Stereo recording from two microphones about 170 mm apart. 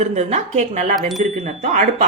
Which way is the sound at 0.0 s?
40° right (ahead or behind).